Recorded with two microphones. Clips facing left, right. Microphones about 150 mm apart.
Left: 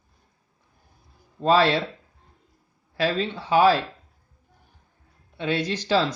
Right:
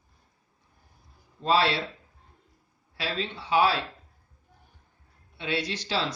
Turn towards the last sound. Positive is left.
turn(degrees=45)  # may be behind; listen again after turning